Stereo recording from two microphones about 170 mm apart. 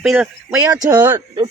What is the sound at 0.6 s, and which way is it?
Speech, 20° right (ahead or behind).